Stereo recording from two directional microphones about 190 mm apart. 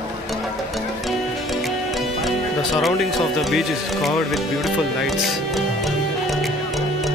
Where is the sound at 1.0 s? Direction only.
Centre (ahead or behind).